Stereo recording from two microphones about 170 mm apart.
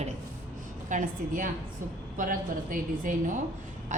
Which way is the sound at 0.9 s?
50° right (ahead or behind).